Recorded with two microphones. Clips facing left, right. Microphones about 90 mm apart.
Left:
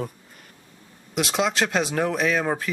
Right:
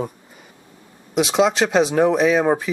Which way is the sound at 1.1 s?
Centre (ahead or behind).